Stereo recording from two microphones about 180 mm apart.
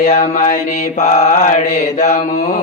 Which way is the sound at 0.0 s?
40° left (ahead or behind).